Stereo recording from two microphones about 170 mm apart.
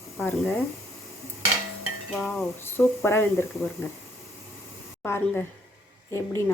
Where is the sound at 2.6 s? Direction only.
15° left (ahead or behind).